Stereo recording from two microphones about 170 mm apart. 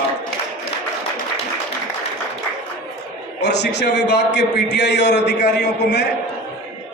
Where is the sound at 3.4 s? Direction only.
85° left.